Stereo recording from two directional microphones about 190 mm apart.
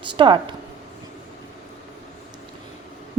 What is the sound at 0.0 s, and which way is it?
Speech, 25° right (ahead or behind).